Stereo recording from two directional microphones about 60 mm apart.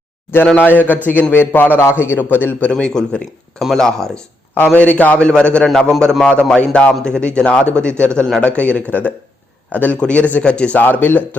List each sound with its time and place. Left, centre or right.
0.6 s a man's voice: left
2.6 s a man's voice: centre
4.5 s a man's voice: left
10.8 s a man's voice: left